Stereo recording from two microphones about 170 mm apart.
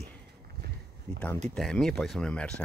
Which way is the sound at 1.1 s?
5° left (ahead or behind).